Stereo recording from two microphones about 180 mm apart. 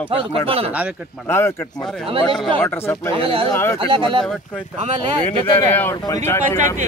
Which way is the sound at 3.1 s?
30° right (ahead or behind).